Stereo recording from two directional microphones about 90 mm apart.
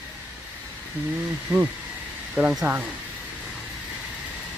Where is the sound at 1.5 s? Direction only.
15° right (ahead or behind).